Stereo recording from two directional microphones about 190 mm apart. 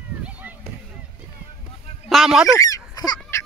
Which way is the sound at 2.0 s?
Centre (ahead or behind).